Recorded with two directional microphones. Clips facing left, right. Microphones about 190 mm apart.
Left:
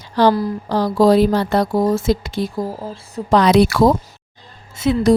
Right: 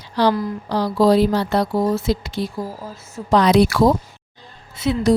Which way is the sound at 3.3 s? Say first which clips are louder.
Left 2 dB; 70° left (ahead or behind).